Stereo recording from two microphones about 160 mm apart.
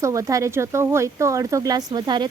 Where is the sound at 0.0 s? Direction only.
20° right (ahead or behind).